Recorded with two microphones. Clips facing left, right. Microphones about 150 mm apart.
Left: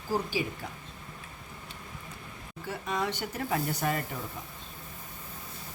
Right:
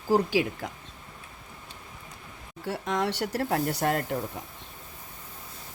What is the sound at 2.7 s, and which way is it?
Speech, 75° right (ahead or behind).